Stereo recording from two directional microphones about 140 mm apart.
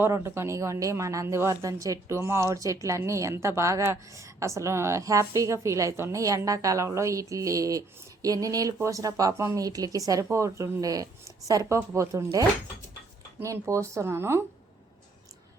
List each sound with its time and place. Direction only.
0.0 s a woman's voice: 20° right (ahead or behind)